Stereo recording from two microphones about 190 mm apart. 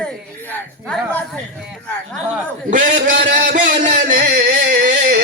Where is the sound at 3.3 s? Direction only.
40° right (ahead or behind).